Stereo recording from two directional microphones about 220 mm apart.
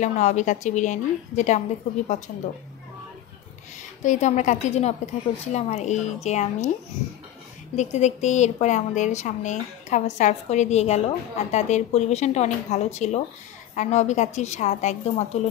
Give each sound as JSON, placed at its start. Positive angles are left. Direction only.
{"t": 0.0, "sound": "a woman's voice", "side_deg": 35}
{"t": 4.0, "sound": "a woman's voice", "side_deg": 35}
{"t": 7.7, "sound": "a woman's voice", "side_deg": 30}